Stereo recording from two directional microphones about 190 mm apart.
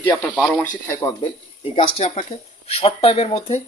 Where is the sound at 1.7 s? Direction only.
35° left (ahead or behind).